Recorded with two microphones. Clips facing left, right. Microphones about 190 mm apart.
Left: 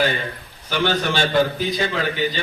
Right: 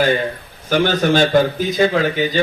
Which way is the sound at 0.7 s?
45° right (ahead or behind).